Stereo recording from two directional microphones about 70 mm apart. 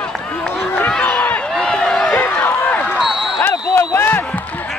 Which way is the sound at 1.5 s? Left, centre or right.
Centre.